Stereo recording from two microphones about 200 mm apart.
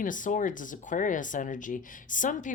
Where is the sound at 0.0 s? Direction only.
40° left (ahead or behind).